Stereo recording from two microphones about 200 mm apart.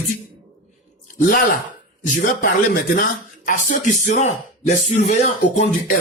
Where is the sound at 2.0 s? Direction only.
40° left (ahead or behind).